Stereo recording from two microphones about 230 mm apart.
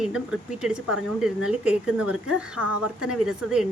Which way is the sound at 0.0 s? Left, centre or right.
Centre.